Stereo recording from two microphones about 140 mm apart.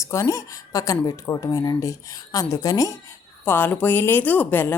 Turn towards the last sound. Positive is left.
turn(degrees=15)  # may be behind; listen again after turning